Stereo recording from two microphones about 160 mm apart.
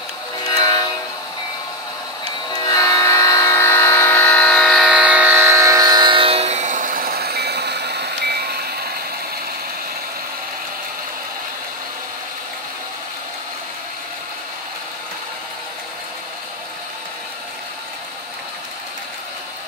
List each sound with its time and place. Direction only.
2.6 s electric toothbrush: 20° left (ahead or behind); by 8.6 s 85° right